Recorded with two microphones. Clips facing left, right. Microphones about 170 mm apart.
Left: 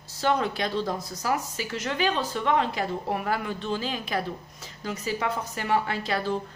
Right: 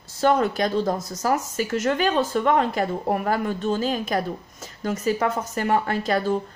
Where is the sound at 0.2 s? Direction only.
50° right (ahead or behind).